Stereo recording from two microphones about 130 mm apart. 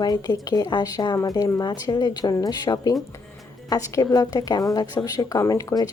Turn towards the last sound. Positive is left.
turn(degrees=25)  # may be behind; listen again after turning